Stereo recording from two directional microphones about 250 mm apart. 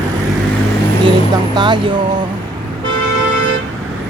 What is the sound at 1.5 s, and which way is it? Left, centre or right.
Speech, centre.